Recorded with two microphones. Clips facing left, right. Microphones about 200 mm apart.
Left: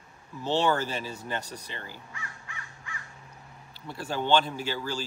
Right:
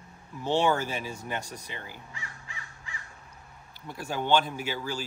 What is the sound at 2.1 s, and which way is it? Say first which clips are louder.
Crow: left 1 dB; 30° right (ahead or behind).